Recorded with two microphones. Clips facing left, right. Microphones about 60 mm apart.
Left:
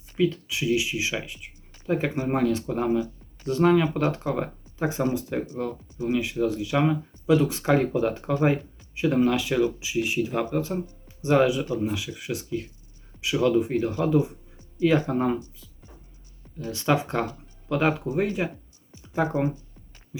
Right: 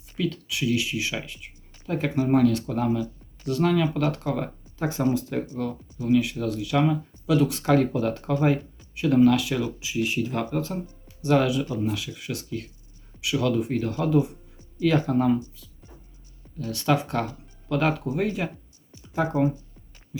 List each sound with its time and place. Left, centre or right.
0.2 s speech: left
18.9 s music: left